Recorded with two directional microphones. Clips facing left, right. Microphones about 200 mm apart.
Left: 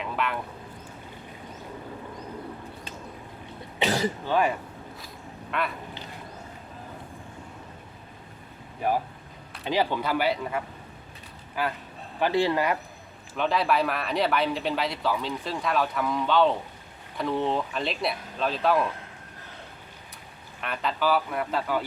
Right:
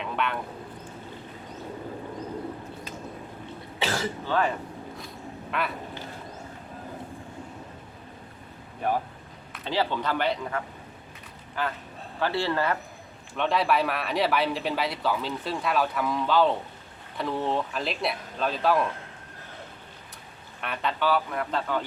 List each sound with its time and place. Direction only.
0.0 s a sound: centre (ahead or behind)
3.8 s cough: 20° left (ahead or behind)
4.9 s a sound: centre (ahead or behind)
8.8 s a man's voice: 10° left (ahead or behind)
13.3 s speech: centre (ahead or behind)
20.6 s speech: centre (ahead or behind)